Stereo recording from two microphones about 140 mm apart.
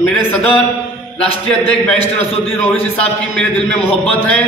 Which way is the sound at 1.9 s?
45° left (ahead or behind).